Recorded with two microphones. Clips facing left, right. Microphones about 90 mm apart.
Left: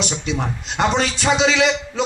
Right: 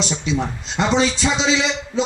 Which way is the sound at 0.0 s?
55° left (ahead or behind).